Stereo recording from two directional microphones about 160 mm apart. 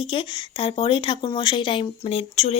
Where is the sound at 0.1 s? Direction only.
35° left (ahead or behind).